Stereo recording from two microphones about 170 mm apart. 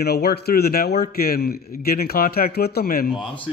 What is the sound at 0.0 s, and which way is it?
A man's voice, 70° left (ahead or behind).